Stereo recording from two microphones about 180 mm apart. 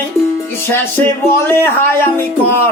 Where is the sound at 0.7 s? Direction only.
10° left (ahead or behind).